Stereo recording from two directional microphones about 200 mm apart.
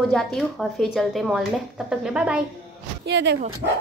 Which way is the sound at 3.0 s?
60° right (ahead or behind).